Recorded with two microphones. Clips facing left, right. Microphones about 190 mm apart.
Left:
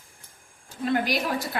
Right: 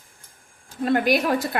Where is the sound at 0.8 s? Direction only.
55° right (ahead or behind).